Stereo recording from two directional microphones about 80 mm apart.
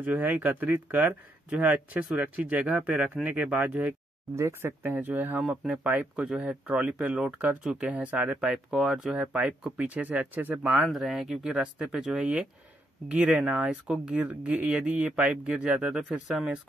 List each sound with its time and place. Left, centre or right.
0.0 s speech: right
4.4 s speech: right; by 8.9 s centre
9.2 s speech: centre
10.8 s speech: centre